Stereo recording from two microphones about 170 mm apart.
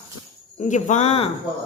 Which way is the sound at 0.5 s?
45° left (ahead or behind).